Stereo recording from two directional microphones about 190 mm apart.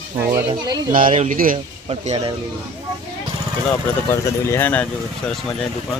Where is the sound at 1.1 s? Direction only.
40° right (ahead or behind).